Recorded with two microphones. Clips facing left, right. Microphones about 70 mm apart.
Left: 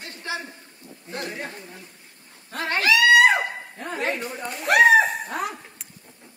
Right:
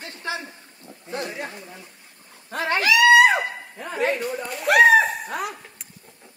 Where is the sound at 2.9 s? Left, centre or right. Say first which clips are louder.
Right 2 dB; centre.